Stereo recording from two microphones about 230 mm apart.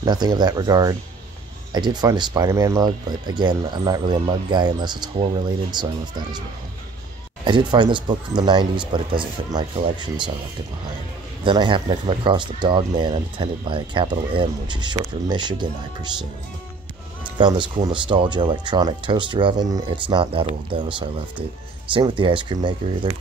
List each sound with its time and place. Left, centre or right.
0.0 s speech: centre
7.4 s speech: right
11.4 s speech: right
17.4 s speech: centre